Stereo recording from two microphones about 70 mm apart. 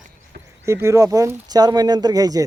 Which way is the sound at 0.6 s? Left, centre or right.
Right.